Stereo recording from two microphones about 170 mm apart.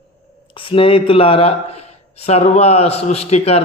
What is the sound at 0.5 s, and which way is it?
A man's voice, 30° left (ahead or behind).